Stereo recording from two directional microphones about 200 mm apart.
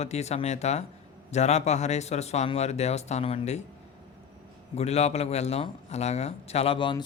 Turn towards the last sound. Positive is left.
turn(degrees=25)  # may be behind; listen again after turning